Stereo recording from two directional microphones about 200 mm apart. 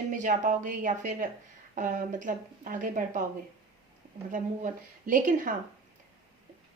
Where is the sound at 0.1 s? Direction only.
40° right (ahead or behind).